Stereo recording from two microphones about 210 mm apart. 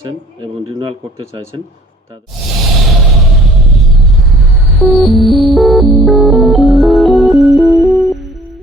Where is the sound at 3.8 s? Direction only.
Centre (ahead or behind).